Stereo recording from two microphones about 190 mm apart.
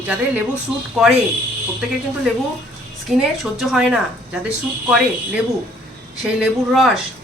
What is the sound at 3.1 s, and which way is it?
A woman's voice, centre (ahead or behind).